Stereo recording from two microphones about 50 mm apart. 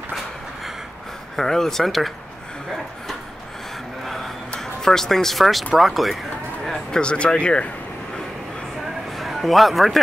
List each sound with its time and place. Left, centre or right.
1.3 s speech: centre
4.0 s vehicle: centre
4.6 s speech: centre
6.9 s speech: centre
9.2 s speech: centre